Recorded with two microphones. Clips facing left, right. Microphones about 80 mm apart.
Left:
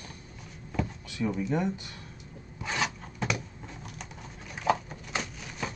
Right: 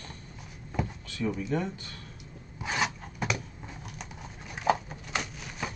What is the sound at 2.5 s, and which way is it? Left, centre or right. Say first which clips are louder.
Zipper: right 1 dB; centre.